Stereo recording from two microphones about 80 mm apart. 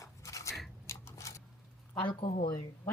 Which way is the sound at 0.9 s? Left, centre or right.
Left.